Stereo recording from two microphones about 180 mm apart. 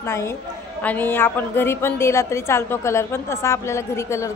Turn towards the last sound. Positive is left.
turn(degrees=15)  # may be behind; listen again after turning